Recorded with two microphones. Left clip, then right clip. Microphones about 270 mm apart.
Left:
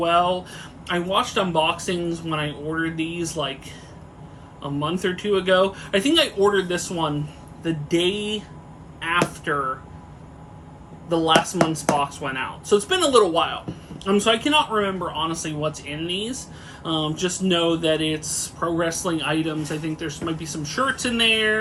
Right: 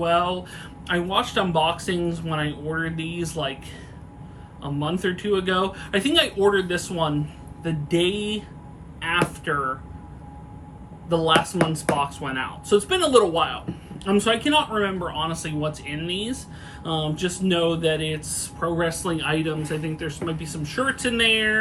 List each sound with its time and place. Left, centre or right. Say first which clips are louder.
0.0 s speech: left 2 dB; centre
4.6 s speech: left 1 dB; centre
11.1 s speech: left 1 dB; centre